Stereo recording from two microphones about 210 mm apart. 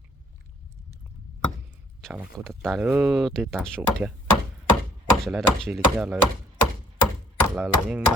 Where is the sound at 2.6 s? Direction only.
5° right (ahead or behind).